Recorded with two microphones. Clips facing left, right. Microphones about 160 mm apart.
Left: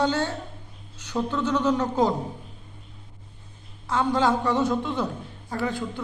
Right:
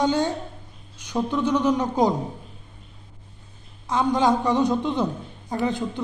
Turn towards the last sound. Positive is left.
turn(degrees=-20)  # may be behind; listen again after turning